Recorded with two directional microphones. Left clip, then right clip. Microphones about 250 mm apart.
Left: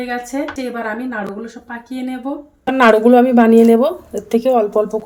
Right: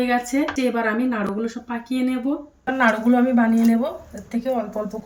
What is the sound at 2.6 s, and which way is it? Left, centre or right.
A woman's voice, left.